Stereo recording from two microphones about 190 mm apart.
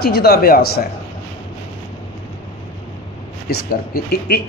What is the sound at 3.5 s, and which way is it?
Speech, 55° left (ahead or behind).